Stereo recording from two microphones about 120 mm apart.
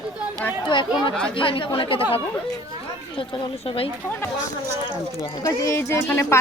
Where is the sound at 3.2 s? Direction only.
50° left (ahead or behind).